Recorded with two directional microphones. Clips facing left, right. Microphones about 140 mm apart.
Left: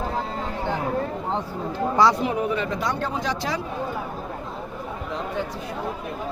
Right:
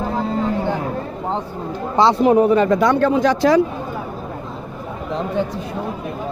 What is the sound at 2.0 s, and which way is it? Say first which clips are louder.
Speech: right 4 dB; 25° right (ahead or behind).